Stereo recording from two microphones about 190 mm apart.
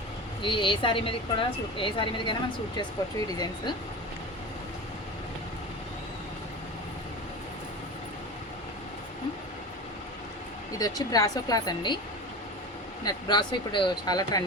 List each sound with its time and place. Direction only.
0.4 s speech: 25° left (ahead or behind)
10.8 s speech: 20° left (ahead or behind)
13.1 s speech: 25° left (ahead or behind)